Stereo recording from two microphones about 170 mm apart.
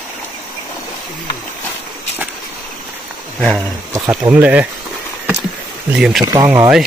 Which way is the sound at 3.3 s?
Centre (ahead or behind).